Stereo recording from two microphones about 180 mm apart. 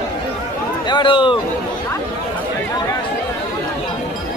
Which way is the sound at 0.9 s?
25° left (ahead or behind).